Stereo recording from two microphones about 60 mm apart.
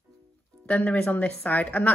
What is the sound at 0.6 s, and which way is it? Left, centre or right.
Speech, left.